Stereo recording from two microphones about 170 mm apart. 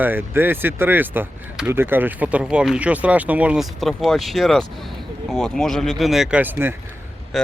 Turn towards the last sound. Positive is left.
turn(degrees=0)  # may be behind; listen again after turning